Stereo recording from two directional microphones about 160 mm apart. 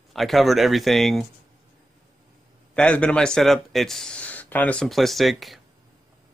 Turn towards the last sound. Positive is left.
turn(degrees=0)  # may be behind; listen again after turning